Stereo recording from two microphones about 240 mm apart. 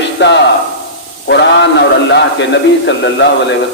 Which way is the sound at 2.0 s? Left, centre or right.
Left.